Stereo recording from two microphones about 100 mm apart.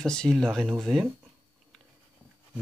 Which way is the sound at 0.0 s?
5° left (ahead or behind).